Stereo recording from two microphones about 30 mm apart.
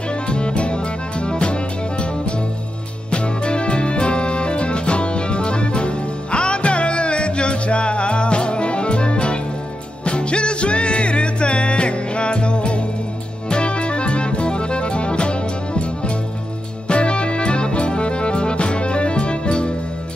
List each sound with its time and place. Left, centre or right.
0.1 s music: left
3.1 s music: left
16.8 s music: left